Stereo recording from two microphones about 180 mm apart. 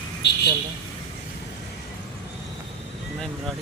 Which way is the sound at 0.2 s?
75° left (ahead or behind).